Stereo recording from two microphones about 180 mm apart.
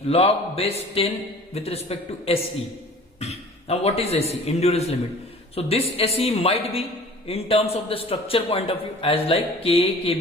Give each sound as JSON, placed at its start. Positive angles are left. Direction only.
{"t": 0.1, "sound": "a man's voice", "side_deg": 35}